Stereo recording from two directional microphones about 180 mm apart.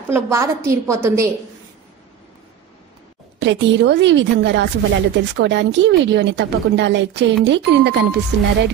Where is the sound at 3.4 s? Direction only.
85° right.